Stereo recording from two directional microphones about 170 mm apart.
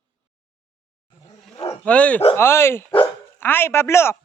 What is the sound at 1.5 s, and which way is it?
Dog, 35° left (ahead or behind).